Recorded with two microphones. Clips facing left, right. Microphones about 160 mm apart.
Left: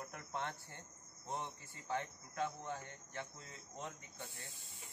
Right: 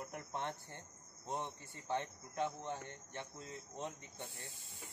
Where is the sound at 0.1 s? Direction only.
20° right (ahead or behind).